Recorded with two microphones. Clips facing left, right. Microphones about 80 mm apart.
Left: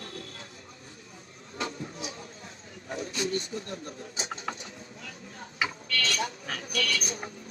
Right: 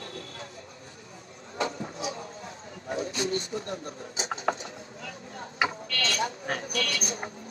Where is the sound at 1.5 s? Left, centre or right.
Right.